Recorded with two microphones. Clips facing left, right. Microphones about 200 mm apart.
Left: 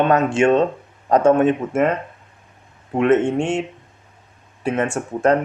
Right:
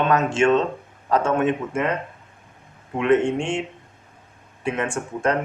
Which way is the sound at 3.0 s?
45° left (ahead or behind).